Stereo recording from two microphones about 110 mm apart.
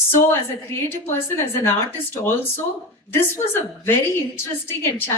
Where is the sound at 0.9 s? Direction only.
20° left (ahead or behind).